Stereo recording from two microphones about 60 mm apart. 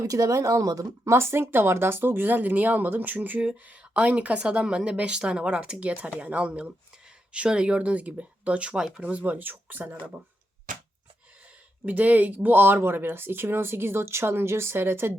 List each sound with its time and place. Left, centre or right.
0.0 s speech: right
1.0 s speech: right
11.9 s speech: right